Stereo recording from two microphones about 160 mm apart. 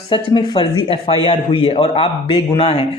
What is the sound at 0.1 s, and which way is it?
A man's voice, 30° left (ahead or behind).